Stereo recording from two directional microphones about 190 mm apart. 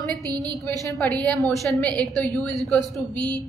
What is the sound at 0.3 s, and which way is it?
Speech, 20° right (ahead or behind).